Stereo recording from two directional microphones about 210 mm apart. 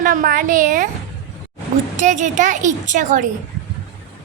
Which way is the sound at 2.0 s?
35° right (ahead or behind).